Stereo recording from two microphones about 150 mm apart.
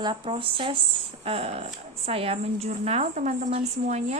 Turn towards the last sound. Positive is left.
turn(degrees=-50)  # may be behind; listen again after turning